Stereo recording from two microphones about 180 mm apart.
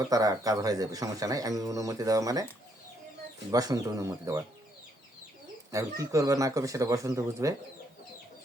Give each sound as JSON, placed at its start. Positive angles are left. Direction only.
{"t": 0.0, "sound": "speech", "side_deg": -20}
{"t": 3.5, "sound": "speech", "side_deg": -20}
{"t": 5.7, "sound": "speech", "side_deg": -15}